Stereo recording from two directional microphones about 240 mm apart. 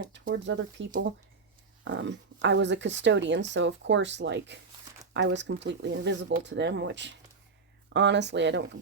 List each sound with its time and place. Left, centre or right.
0.1 s speech: right